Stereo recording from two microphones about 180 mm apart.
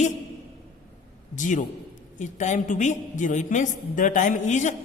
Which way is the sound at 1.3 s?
45° left (ahead or behind).